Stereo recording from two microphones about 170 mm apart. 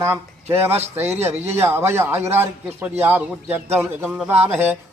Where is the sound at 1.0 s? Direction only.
40° right (ahead or behind).